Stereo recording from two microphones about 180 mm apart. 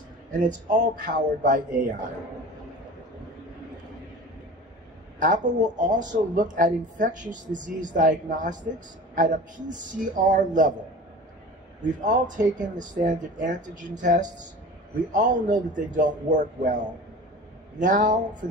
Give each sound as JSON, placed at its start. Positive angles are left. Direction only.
{"t": 0.3, "sound": "speech", "side_deg": -45}
{"t": 5.2, "sound": "speech", "side_deg": -45}
{"t": 11.8, "sound": "speech", "side_deg": -45}